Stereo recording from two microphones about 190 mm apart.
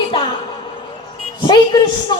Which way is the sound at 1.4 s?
25° left (ahead or behind).